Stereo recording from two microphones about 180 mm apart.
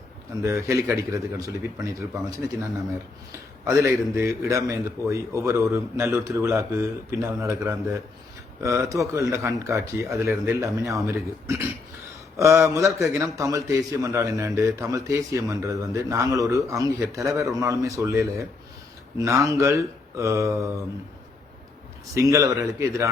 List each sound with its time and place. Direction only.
0.4 s a man's voice: 15° right (ahead or behind)
22.1 s a man's voice: 15° right (ahead or behind)